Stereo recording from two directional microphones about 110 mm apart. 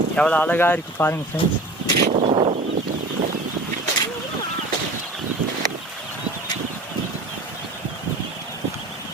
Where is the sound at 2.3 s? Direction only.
60° right (ahead or behind).